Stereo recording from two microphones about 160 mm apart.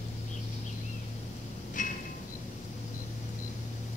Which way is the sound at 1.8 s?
55° left (ahead or behind).